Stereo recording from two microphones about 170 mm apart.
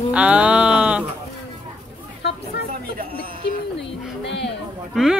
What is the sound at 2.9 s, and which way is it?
Speech, 55° right (ahead or behind).